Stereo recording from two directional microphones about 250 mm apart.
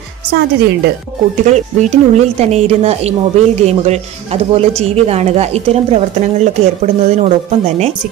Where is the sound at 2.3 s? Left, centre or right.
Right.